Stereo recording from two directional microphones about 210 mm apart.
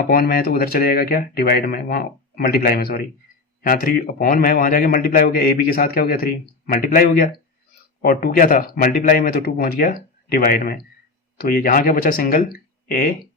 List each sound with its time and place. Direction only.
0.0 s a man's voice: 45° left (ahead or behind)